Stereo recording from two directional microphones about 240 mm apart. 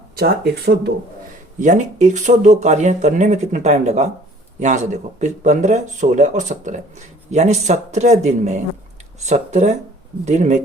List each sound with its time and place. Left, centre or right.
0.2 s speech: right
1.5 s speech: right